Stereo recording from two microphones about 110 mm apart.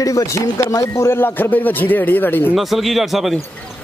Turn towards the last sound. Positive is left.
turn(degrees=0)  # may be behind; listen again after turning